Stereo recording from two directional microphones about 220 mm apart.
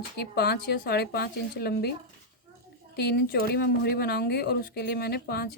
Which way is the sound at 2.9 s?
45° left (ahead or behind).